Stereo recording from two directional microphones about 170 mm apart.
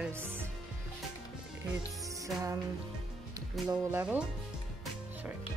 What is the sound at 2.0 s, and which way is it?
Music, 20° right (ahead or behind).